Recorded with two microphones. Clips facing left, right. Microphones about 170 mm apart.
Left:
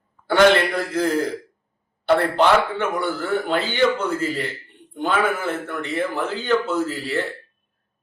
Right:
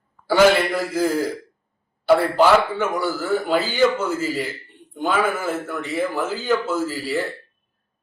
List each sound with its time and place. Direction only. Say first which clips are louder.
0.3 s a man's voice: even; 5° right (ahead or behind)